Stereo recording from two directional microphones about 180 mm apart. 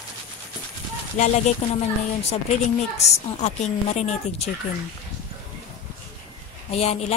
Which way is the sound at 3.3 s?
40° left (ahead or behind).